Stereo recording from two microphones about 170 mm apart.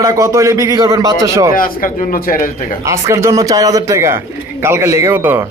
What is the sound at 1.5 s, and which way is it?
Speech, 55° left (ahead or behind).